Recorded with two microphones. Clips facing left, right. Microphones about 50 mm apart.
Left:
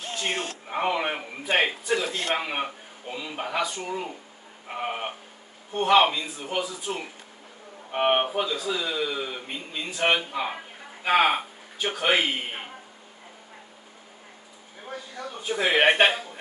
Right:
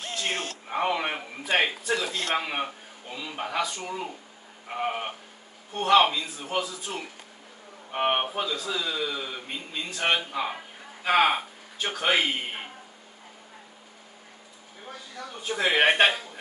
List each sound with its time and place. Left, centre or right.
0.7 s a man's voice: centre
2.0 s a man's voice: left
2.3 s a man's voice: centre
15.4 s a man's voice: centre